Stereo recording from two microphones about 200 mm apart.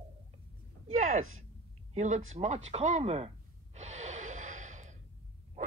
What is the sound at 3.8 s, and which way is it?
Gasp, 35° right (ahead or behind).